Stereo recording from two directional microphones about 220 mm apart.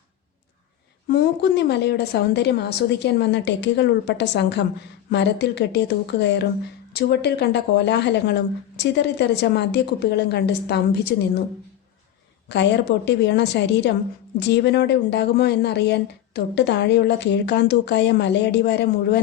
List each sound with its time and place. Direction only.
1.0 s speech: 50° left (ahead or behind)
12.5 s speech: 50° left (ahead or behind)